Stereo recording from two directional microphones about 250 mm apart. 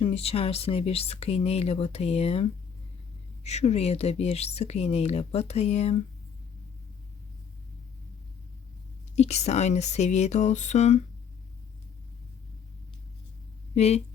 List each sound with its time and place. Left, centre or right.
0.0 s speech: left
9.1 s speech: left
13.7 s speech: left